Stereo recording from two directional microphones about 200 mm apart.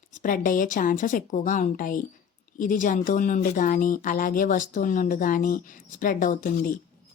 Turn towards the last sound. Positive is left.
turn(degrees=45)  # may be behind; listen again after turning